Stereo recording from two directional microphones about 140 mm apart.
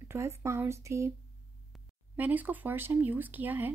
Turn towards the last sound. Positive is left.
turn(degrees=-15)  # may be behind; listen again after turning